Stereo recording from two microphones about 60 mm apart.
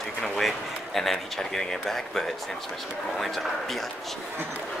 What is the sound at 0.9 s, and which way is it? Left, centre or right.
Speech, centre.